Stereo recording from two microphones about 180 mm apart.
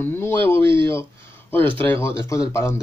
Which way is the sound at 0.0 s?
15° left (ahead or behind).